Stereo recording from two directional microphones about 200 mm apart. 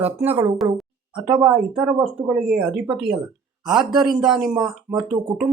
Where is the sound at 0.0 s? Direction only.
10° right (ahead or behind).